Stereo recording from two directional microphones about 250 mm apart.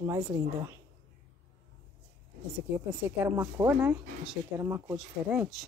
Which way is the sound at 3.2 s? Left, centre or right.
Centre.